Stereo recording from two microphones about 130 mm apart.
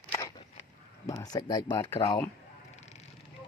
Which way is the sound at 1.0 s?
30° left (ahead or behind).